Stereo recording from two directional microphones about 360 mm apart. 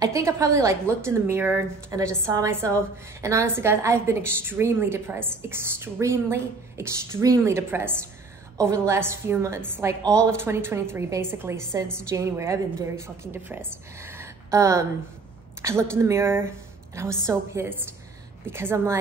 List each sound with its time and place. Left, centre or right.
0.0 s a woman's voice: centre